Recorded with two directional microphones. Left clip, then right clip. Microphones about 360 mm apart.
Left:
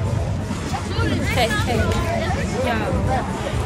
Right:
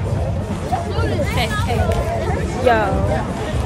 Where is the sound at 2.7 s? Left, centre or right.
Centre.